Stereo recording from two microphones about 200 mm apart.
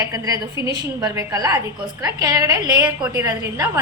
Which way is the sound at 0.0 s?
15° right (ahead or behind).